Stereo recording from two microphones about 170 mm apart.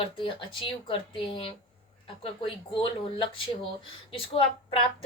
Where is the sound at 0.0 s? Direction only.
30° left (ahead or behind).